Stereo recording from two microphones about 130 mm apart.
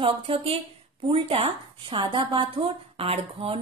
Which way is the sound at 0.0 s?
45° right (ahead or behind).